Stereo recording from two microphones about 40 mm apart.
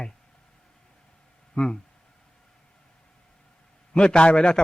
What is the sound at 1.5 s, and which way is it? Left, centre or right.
Speech, left.